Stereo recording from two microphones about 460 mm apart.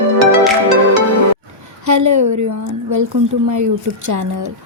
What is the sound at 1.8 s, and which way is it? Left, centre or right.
Speech, right.